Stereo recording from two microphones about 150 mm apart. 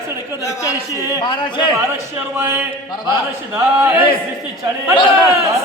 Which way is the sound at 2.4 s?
15° right (ahead or behind).